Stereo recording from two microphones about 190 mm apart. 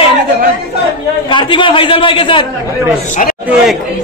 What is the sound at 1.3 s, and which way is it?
A man's voice, 25° left (ahead or behind).